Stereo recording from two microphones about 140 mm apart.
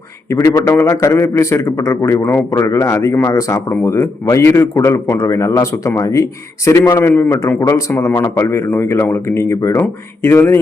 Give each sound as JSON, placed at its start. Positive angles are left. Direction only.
{"t": 0.3, "sound": "a man's voice", "side_deg": 20}